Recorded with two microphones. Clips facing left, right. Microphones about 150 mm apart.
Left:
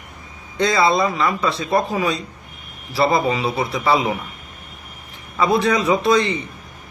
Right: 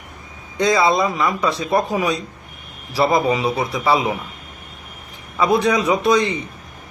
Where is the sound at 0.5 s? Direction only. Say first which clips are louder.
Right 1 dB; 15° right (ahead or behind).